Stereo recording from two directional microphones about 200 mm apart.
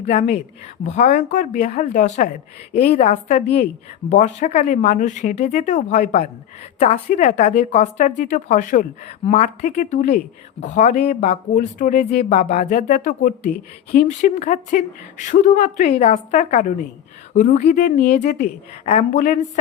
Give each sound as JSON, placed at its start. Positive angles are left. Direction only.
{"t": 0.0, "sound": "a woman's voice", "side_deg": 35}